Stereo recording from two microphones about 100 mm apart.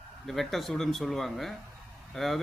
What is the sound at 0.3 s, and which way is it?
A man's voice, centre (ahead or behind).